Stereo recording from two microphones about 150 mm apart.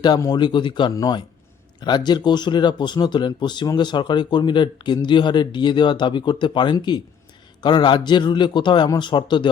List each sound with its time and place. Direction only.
0.0 s speech: 25° left (ahead or behind)